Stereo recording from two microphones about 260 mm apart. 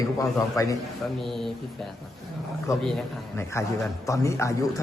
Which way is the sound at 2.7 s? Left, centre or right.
Centre.